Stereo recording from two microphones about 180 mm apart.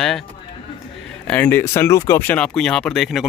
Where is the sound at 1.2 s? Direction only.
10° left (ahead or behind).